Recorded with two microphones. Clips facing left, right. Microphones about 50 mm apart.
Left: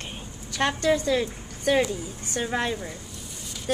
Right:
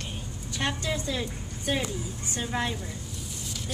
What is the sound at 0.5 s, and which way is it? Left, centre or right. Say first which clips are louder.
A woman's voice: left 7 dB; left.